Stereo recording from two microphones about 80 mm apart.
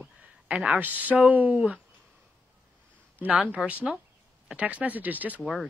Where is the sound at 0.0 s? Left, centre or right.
Centre.